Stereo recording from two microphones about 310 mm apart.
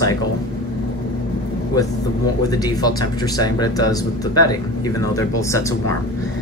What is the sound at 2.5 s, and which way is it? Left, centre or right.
Speech, centre.